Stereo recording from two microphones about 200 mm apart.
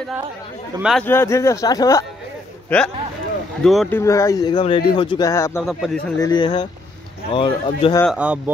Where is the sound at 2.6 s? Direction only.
5° left (ahead or behind).